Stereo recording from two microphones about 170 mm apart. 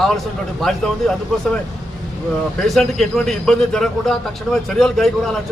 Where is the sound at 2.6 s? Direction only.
Centre (ahead or behind).